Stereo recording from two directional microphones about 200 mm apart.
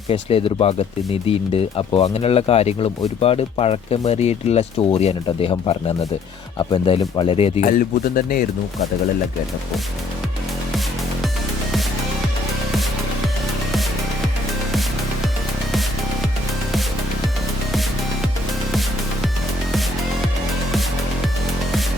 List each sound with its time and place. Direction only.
0.1 s speech: 30° left (ahead or behind)
7.6 s speech: 45° left (ahead or behind)